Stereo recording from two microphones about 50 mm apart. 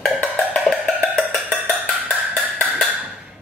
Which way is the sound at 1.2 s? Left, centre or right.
Left.